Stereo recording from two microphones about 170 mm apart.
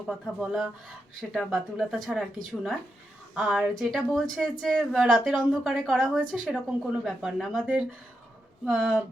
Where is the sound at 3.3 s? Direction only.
5° right (ahead or behind).